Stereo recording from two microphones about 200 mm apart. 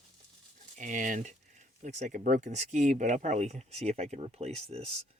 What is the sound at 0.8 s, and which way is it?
Speech, 40° right (ahead or behind).